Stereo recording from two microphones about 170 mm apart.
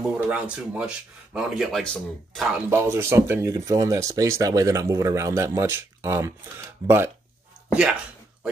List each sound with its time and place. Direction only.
0.0 s speech: 5° right (ahead or behind)
2.7 s speech: 15° right (ahead or behind)